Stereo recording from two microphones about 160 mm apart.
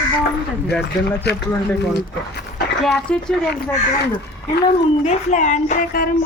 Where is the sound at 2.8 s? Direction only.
5° left (ahead or behind).